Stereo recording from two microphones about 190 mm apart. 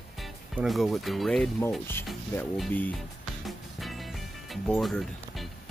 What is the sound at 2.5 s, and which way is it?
Speech, 5° left (ahead or behind).